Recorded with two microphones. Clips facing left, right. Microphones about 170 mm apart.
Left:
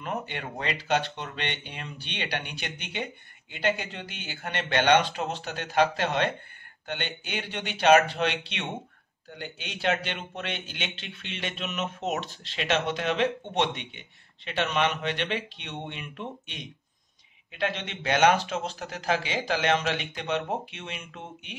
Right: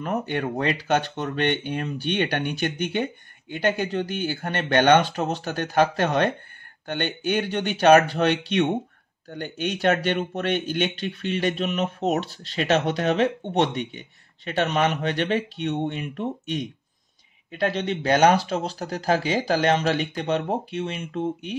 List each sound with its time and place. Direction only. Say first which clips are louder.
0.0 s speech: right 8 dB; 45° right (ahead or behind)